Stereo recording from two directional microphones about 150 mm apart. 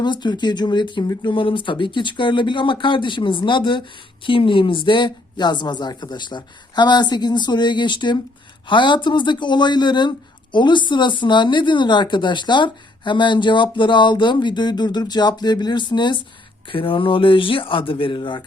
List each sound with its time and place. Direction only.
0.0 s speech: 30° left (ahead or behind)